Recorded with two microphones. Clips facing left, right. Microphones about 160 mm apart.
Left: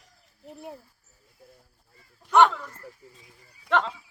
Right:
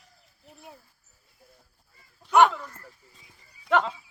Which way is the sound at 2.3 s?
5° right (ahead or behind).